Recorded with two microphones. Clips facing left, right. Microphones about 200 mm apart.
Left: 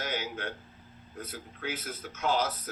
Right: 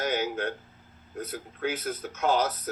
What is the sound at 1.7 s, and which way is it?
Speech, 40° right (ahead or behind).